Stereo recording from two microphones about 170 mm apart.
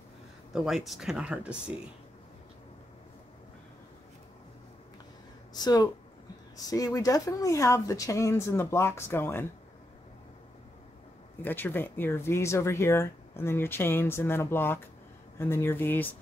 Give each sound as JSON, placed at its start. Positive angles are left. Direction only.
{"t": 0.5, "sound": "speech", "side_deg": 0}
{"t": 5.5, "sound": "speech", "side_deg": 25}
{"t": 11.4, "sound": "speech", "side_deg": 10}